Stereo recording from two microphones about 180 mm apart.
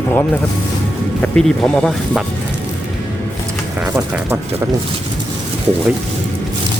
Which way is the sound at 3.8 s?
10° right (ahead or behind).